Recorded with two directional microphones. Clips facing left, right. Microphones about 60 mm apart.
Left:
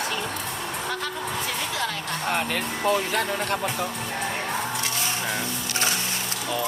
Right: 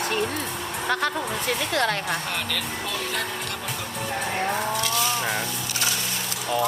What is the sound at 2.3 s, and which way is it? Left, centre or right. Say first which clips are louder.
Speech: left 3 dB; left.